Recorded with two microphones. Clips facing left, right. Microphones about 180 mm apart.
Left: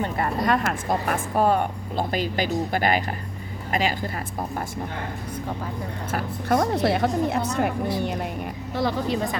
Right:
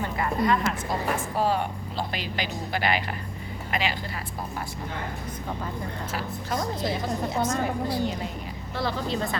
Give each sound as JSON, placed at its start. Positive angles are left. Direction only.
{"t": 0.4, "sound": "a woman's voice", "side_deg": 50}
{"t": 6.1, "sound": "a woman's voice", "side_deg": 60}
{"t": 8.7, "sound": "speech", "side_deg": 15}